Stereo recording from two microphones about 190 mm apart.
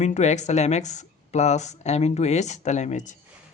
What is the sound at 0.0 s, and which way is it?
Speech, 35° left (ahead or behind).